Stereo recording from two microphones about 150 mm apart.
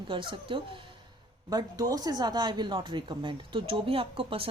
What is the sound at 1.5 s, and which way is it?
Speech, 25° right (ahead or behind).